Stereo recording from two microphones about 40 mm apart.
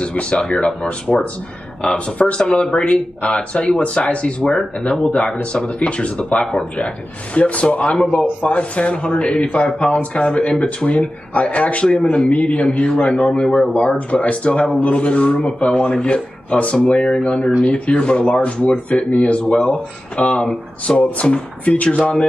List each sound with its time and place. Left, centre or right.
0.0 s speech: left
1.1 s speech: centre
1.8 s speech: left